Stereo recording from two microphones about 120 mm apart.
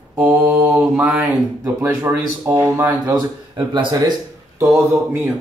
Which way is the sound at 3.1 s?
40° right (ahead or behind).